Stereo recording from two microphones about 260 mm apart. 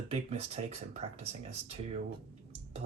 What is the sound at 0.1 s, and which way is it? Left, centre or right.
Speech, right.